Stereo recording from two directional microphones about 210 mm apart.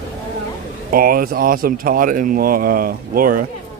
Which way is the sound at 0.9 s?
45° right (ahead or behind).